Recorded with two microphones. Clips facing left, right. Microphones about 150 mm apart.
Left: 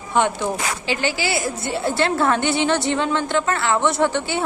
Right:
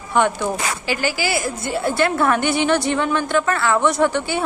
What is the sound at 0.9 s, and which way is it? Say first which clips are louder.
A woman's voice: right 1 dB; 25° left (ahead or behind).